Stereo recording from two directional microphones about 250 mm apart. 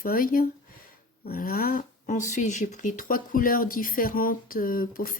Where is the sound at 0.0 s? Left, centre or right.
Left.